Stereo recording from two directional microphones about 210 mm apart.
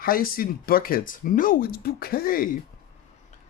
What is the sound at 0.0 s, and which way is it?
Speech, 45° left (ahead or behind).